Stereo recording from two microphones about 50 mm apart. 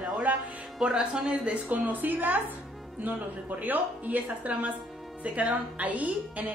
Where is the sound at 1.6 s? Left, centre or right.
Right.